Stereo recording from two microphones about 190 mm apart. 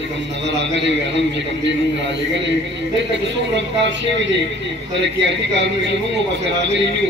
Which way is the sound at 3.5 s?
65° right (ahead or behind).